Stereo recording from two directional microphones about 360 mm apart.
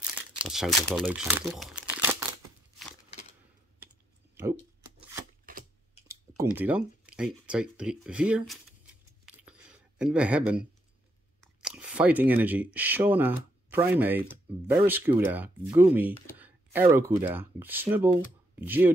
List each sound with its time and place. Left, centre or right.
0.0 s crumpling: centre
5.4 s typewriter: right
6.0 s speech: centre
9.2 s a sound: centre
11.4 s speech: centre